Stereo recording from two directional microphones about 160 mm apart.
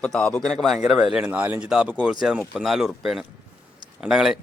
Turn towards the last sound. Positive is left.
turn(degrees=0)  # may be behind; listen again after turning